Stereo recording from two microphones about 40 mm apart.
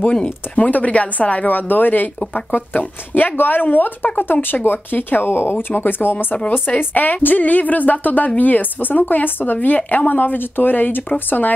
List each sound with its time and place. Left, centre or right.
0.1 s speech: left
0.7 s speech: left
6.8 s speech: left